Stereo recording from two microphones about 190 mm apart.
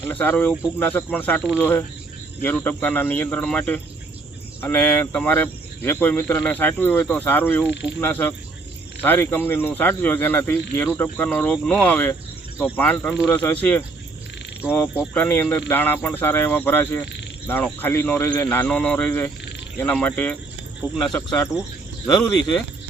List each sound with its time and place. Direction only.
0.0 s speech: 10° left (ahead or behind)